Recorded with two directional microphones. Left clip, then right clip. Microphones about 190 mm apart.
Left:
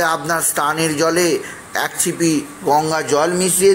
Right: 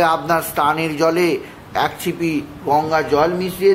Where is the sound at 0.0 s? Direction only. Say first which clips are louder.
Right 2 dB; 15° left (ahead or behind).